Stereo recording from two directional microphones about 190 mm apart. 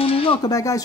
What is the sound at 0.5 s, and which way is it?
Speech, 20° left (ahead or behind).